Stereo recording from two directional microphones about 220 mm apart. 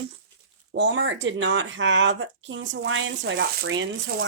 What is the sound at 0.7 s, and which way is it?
Speech, 55° right (ahead or behind).